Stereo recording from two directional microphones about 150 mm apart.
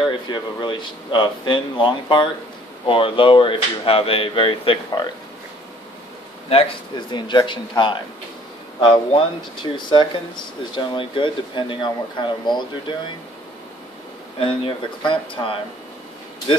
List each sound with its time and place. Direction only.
0.3 s speech: 30° left (ahead or behind)
6.5 s speech: 35° left (ahead or behind)
14.4 s speech: 35° left (ahead or behind)